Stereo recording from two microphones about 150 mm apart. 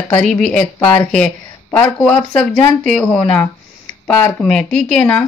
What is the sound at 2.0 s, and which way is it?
Speech, 5° left (ahead or behind).